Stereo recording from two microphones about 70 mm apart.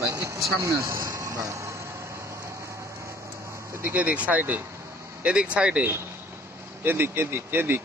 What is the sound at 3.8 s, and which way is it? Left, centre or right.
Speech, right.